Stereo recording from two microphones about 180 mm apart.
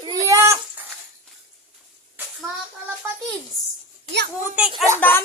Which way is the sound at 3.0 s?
15° right (ahead or behind).